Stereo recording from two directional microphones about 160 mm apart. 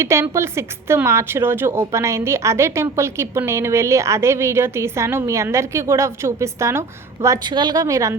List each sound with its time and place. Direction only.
0.0 s a woman's voice: 15° right (ahead or behind)